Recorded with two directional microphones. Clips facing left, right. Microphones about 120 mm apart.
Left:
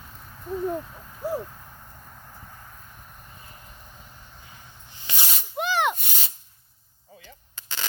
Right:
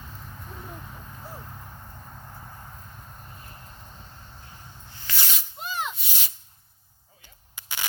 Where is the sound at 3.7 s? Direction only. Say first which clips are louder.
Right 1 dB; 20° right (ahead or behind).